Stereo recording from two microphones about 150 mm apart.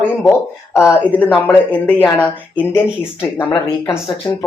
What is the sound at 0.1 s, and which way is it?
Speech, 15° left (ahead or behind).